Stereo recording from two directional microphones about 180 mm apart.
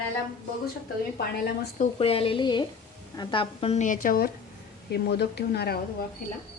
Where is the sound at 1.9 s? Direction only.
30° left (ahead or behind); by 4.3 s 55° left (ahead or behind).